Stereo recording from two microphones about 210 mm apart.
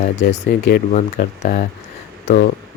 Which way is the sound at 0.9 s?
35° left (ahead or behind).